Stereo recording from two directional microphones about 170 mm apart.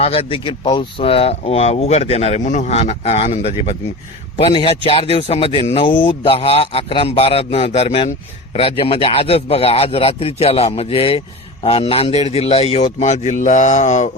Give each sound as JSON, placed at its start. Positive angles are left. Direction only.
{"t": 0.0, "sound": "speech", "side_deg": 35}